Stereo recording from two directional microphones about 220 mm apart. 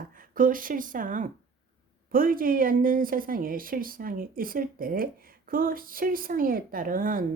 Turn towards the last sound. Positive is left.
turn(degrees=-40)  # may be behind; listen again after turning